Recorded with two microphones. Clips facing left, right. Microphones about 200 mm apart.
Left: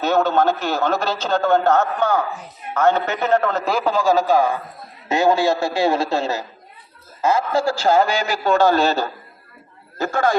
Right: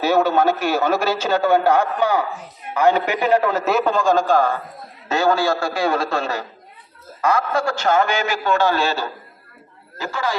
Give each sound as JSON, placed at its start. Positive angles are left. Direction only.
{"t": 0.0, "sound": "a man's voice", "side_deg": -10}
{"t": 5.0, "sound": "a man's voice", "side_deg": 20}